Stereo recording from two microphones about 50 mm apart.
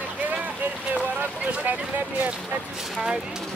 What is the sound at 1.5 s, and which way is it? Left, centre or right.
Speech, right.